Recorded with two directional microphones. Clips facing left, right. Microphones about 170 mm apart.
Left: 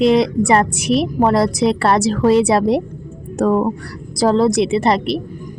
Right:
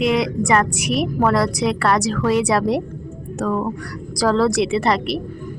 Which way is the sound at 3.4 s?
35° left (ahead or behind).